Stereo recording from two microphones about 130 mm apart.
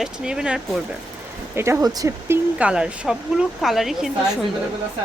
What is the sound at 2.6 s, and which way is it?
Speech, 10° right (ahead or behind).